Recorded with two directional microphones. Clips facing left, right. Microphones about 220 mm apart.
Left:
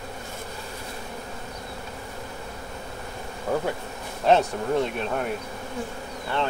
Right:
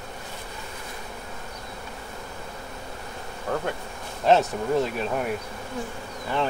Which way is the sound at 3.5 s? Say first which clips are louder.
Left 2 dB; 10° left (ahead or behind).